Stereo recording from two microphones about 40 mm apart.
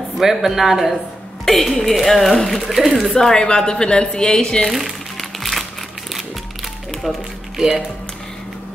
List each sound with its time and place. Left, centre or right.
0.2 s a man's voice: centre
1.4 s speech: centre
3.2 s a woman's voice: centre
4.6 s speech: centre
5.4 s music: centre
6.9 s music: centre
7.5 s speech: centre